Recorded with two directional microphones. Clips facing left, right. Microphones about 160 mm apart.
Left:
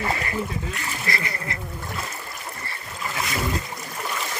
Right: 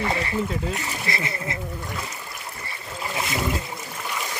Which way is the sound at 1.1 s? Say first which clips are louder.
Right 2 dB; 20° right (ahead or behind).